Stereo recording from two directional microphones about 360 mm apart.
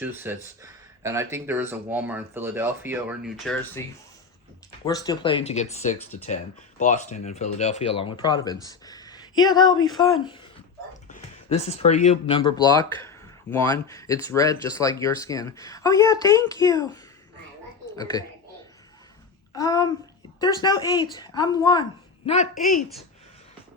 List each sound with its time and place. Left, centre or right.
0.0 s speech: centre
8.6 s a sound: centre
9.3 s speech: left
11.1 s speech: centre
19.5 s speech: centre
22.3 s speech: left